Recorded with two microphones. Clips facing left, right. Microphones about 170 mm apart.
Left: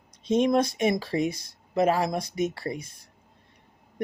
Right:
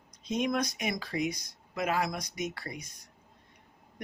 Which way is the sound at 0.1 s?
25° left (ahead or behind).